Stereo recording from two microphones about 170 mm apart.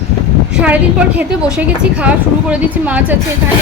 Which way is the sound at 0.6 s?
10° right (ahead or behind).